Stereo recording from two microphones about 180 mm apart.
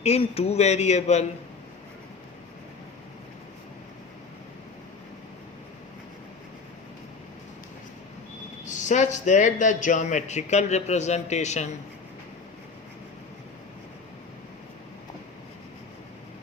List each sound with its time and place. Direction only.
0.0 s a man's voice: 35° left (ahead or behind)
8.6 s a man's voice: 45° left (ahead or behind)